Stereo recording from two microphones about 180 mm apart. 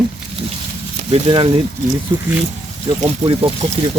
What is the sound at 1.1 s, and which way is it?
Speech, 30° right (ahead or behind).